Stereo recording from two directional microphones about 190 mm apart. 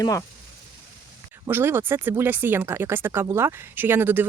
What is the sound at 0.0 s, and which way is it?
Speech, 15° left (ahead or behind).